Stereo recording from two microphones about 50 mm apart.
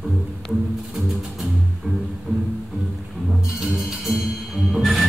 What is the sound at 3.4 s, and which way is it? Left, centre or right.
Music, centre.